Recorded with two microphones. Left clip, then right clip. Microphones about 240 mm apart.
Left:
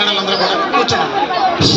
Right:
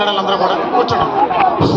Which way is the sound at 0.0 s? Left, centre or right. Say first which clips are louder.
Even; left.